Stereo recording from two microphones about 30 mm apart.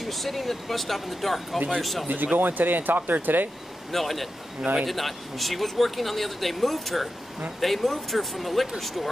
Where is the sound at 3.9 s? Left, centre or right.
Centre.